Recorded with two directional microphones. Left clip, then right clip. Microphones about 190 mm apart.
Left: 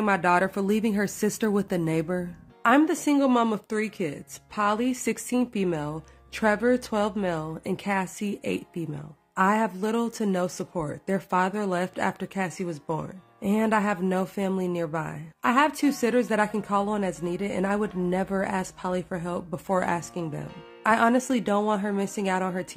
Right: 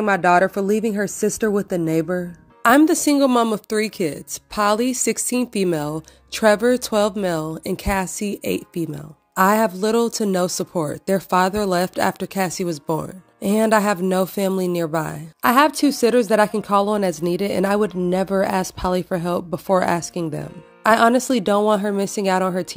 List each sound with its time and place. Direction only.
0.0 s speech: 20° right (ahead or behind)
2.6 s speech: 25° right (ahead or behind)